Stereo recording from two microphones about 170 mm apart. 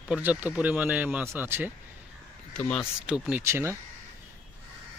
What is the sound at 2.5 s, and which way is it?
Speech, 5° left (ahead or behind).